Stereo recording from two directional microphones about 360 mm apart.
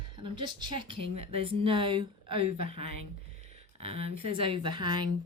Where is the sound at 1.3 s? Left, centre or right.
Centre.